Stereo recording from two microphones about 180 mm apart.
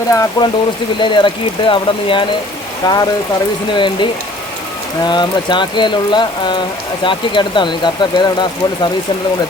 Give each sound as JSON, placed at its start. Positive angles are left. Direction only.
{"t": 0.1, "sound": "speech", "side_deg": 20}